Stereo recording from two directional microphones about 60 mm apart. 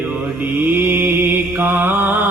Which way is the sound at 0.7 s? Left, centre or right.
Right.